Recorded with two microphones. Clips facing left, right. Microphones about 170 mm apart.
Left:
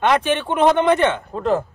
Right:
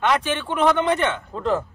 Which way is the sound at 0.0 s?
25° left (ahead or behind).